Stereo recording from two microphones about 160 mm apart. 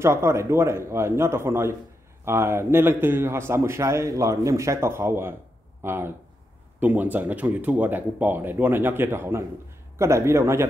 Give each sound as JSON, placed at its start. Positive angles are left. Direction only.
{"t": 0.0, "sound": "a man's voice", "side_deg": -15}